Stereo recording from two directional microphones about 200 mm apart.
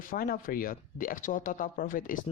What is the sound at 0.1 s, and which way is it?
Speech, 45° left (ahead or behind).